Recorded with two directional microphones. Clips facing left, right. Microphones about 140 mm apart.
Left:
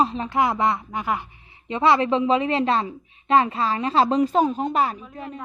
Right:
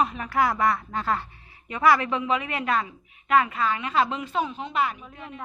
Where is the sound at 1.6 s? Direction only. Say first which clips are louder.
Left 2 dB; 25° left (ahead or behind).